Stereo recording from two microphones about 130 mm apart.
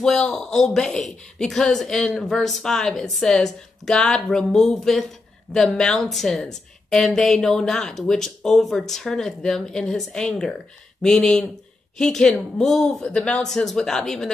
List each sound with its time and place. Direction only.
0.0 s a woman's voice: 5° left (ahead or behind)